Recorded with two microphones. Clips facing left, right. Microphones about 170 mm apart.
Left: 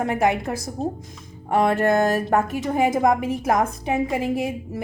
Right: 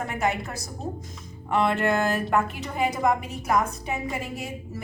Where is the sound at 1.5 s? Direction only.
45° left (ahead or behind).